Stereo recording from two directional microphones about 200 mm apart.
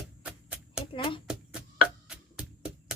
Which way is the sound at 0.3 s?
5° right (ahead or behind).